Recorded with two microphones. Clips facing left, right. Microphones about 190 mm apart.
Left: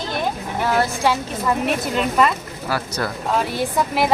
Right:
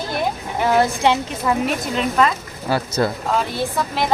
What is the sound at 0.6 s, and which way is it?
Speech, 20° right (ahead or behind).